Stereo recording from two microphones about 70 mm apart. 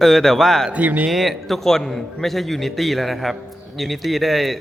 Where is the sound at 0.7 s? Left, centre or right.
Right.